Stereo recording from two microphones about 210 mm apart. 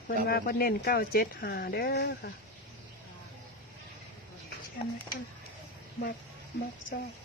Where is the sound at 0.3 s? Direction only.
45° left (ahead or behind).